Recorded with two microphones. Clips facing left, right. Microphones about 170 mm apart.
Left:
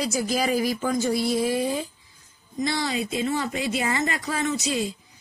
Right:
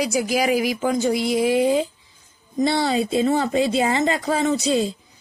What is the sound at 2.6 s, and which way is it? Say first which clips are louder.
Speech: right 6 dB; 30° right (ahead or behind).